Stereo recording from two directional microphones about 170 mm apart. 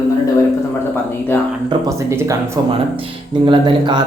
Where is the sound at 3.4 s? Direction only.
30° right (ahead or behind).